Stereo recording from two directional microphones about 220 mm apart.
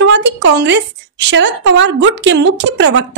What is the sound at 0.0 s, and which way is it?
A woman's voice, 55° right (ahead or behind).